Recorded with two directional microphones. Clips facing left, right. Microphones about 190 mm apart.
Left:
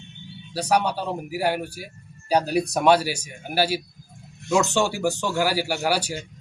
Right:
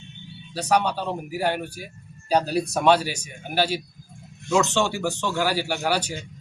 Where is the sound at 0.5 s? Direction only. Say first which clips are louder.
Even; 10° left (ahead or behind).